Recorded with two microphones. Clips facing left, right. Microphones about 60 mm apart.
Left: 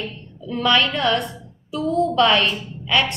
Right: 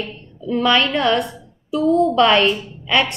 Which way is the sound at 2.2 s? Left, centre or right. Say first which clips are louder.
Right 3 dB; right.